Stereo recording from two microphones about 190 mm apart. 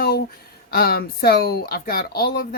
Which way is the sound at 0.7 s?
50° left (ahead or behind).